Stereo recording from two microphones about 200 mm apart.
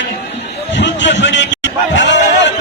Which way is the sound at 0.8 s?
60° left (ahead or behind).